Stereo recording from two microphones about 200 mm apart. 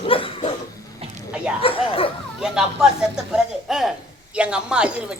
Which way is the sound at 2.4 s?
5° right (ahead or behind).